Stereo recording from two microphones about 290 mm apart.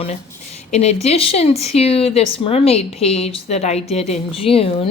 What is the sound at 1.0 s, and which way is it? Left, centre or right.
Speech, left.